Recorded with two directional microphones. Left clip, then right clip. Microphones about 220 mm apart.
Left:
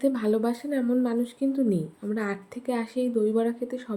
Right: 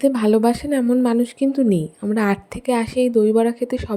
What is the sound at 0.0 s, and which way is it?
A woman's voice, 35° right (ahead or behind).